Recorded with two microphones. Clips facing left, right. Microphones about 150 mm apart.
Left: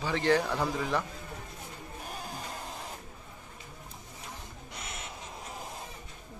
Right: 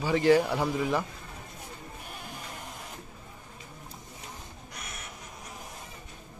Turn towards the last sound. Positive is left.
turn(degrees=25)  # may be behind; listen again after turning